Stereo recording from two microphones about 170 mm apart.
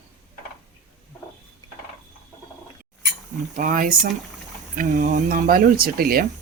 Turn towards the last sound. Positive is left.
turn(degrees=-60)  # may be behind; listen again after turning